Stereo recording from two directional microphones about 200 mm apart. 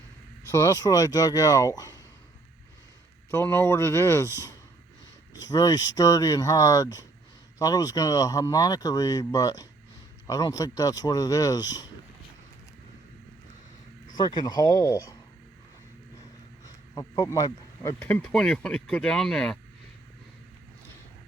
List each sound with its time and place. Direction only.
0.5 s speech: 15° left (ahead or behind)
3.3 s speech: 10° left (ahead or behind)
5.5 s speech: 20° left (ahead or behind)
14.2 s speech: 20° left (ahead or behind)
16.6 s speech: 20° left (ahead or behind); by 19.5 s centre (ahead or behind)